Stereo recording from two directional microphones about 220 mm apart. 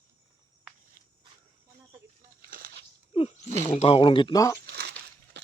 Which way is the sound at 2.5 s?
45° right (ahead or behind).